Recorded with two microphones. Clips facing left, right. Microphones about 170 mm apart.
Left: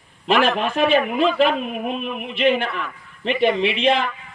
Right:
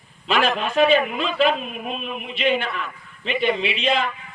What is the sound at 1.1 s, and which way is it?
A man's voice, 55° left (ahead or behind).